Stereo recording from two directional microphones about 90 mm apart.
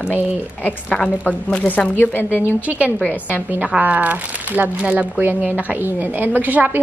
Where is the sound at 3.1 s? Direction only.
20° right (ahead or behind).